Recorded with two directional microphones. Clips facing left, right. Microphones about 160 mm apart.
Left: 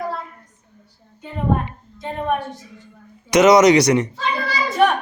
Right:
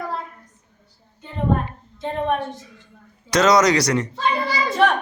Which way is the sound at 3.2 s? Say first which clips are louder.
Left 5 dB; 20° left (ahead or behind).